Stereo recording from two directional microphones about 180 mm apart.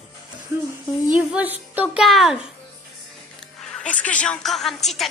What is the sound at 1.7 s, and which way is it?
Speech, 5° right (ahead or behind).